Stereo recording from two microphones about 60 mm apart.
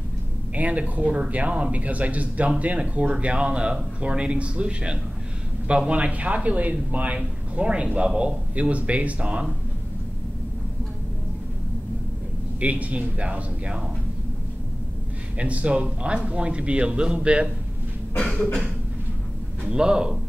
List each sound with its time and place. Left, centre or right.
0.6 s speech: right
12.5 s speech: right
15.3 s speech: right
18.1 s cough: centre
19.7 s a man's voice: centre